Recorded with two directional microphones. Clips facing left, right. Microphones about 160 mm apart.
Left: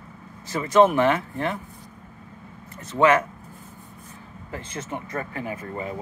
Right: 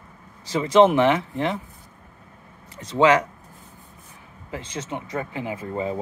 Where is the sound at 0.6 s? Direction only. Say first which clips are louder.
Right 2 dB; 25° right (ahead or behind).